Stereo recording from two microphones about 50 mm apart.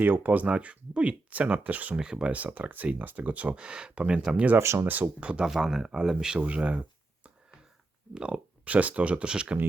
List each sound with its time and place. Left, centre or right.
0.0 s speech: right
2.0 s speech: centre
2.3 s speech: right
4.6 s speech: right
5.2 s speech: right
5.5 s speech: centre
6.4 s speech: right
8.1 s speech: right